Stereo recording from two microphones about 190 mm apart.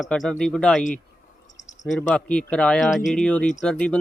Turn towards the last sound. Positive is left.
turn(degrees=5)  # may be behind; listen again after turning